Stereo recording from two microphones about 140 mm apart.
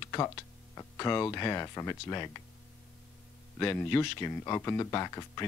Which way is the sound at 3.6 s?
15° left (ahead or behind).